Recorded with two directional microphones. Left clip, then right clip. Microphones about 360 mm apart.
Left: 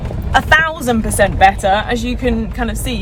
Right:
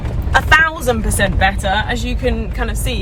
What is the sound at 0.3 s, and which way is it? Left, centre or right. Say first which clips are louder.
Vehicle: even; centre.